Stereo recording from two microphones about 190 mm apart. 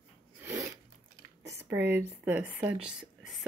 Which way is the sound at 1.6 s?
10° right (ahead or behind).